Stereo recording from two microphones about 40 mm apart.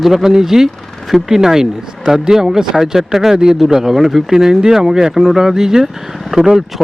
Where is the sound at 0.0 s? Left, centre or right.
Centre.